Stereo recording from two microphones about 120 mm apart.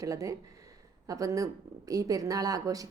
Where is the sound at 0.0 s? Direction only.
30° right (ahead or behind).